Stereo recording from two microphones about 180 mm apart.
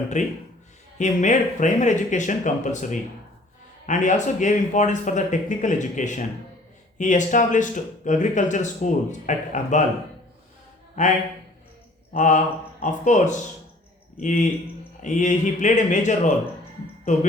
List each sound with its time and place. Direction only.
0.1 s a man's voice: 40° left (ahead or behind)
3.8 s speech: 45° left (ahead or behind)
11.0 s a man's voice: 40° left (ahead or behind)
12.1 s speech: 45° left (ahead or behind)